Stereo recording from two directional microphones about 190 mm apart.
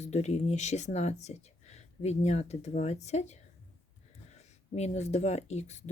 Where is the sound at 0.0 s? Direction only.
35° left (ahead or behind).